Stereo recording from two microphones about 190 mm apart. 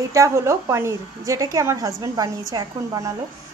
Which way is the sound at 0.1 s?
15° right (ahead or behind).